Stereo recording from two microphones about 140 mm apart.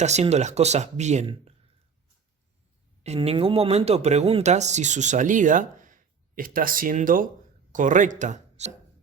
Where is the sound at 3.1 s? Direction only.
40° right (ahead or behind); by 8.7 s 55° right (ahead or behind).